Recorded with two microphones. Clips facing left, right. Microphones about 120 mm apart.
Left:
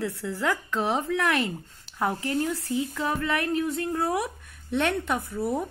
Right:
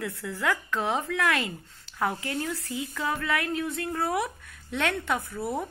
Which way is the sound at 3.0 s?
25° left (ahead or behind).